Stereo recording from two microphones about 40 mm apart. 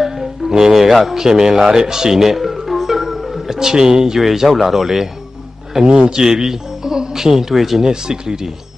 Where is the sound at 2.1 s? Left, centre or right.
Centre.